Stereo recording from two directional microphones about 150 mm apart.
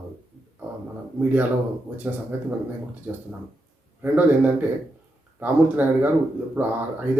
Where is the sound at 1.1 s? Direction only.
10° right (ahead or behind).